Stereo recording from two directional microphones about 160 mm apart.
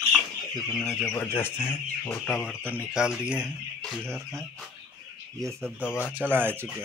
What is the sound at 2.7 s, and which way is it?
Speech, 5° right (ahead or behind).